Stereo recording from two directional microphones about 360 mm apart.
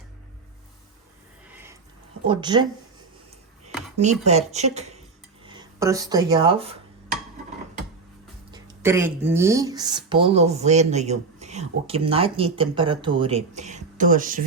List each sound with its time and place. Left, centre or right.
2.2 s speech: centre
3.9 s speech: centre
8.4 s speech: centre